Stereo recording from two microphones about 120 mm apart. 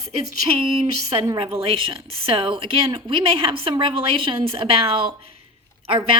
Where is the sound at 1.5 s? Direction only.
50° right (ahead or behind).